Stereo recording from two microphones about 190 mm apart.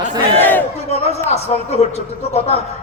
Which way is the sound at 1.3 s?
35° left (ahead or behind).